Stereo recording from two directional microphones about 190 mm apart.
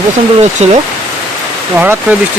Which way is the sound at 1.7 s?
10° right (ahead or behind).